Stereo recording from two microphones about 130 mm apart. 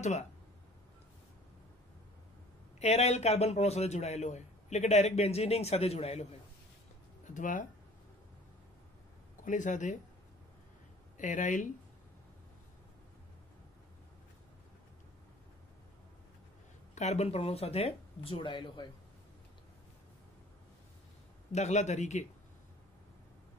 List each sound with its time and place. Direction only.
2.8 s a man's voice: 55° left (ahead or behind)
7.2 s speech: 80° left
9.4 s speech: 75° left (ahead or behind)
11.1 s speech: 75° left (ahead or behind)
16.9 s speech: 60° left (ahead or behind); by 18.9 s 40° left (ahead or behind)
21.5 s a man's voice: 60° left (ahead or behind)